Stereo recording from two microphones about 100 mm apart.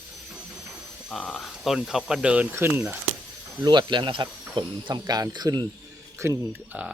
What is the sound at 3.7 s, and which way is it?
Speech, 50° right (ahead or behind).